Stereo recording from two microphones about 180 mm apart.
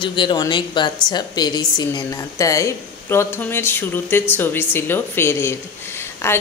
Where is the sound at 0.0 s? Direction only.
25° left (ahead or behind).